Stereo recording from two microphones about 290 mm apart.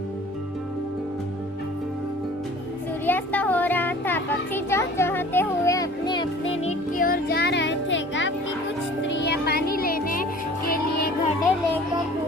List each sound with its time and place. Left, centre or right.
3.1 s children playing: centre; by 8.3 s left
9.0 s music: left